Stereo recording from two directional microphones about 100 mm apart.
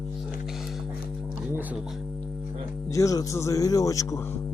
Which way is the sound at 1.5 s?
15° right (ahead or behind).